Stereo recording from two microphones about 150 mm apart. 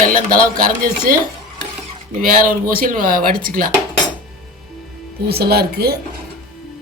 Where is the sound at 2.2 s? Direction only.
70° right (ahead or behind).